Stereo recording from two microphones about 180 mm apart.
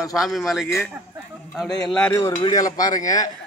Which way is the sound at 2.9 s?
45° left (ahead or behind).